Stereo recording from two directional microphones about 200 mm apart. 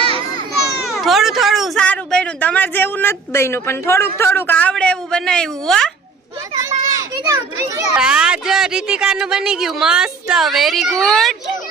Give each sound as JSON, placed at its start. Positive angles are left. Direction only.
{"t": 0.9, "sound": "speech", "side_deg": 0}
{"t": 6.5, "sound": "children playing", "side_deg": -15}
{"t": 7.9, "sound": "speech", "side_deg": -5}